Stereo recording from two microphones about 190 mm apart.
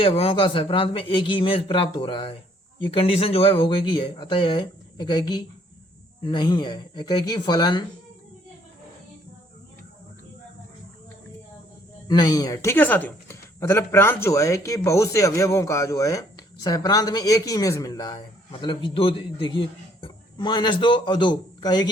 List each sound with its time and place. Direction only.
0.0 s a man's voice: 30° left (ahead or behind)
12.0 s a man's voice: 20° left (ahead or behind)